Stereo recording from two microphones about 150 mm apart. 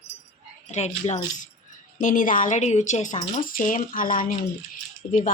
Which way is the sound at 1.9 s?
65° left (ahead or behind).